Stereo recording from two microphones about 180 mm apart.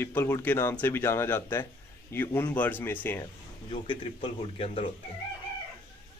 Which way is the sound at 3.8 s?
30° left (ahead or behind).